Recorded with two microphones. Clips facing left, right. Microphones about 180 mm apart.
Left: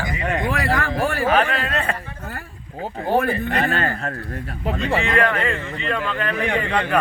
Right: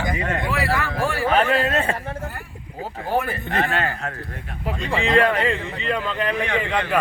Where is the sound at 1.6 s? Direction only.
25° right (ahead or behind).